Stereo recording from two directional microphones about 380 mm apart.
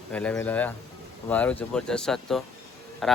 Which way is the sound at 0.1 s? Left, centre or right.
Centre.